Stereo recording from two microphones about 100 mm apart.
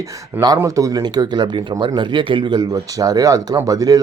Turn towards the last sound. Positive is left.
turn(degrees=-35)  # may be behind; listen again after turning